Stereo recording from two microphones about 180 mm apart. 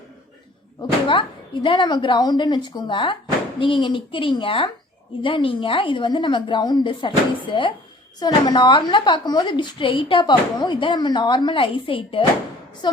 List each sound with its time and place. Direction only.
0.8 s a woman's voice: 25° left (ahead or behind)